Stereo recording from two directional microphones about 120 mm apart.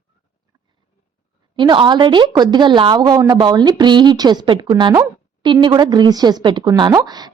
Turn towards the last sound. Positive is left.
turn(degrees=-35)  # may be behind; listen again after turning